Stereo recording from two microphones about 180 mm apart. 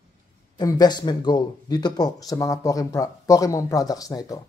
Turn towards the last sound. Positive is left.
turn(degrees=20)  # may be behind; listen again after turning